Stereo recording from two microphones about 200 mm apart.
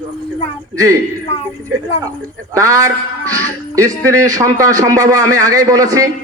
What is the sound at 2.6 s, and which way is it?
Speech, 15° right (ahead or behind).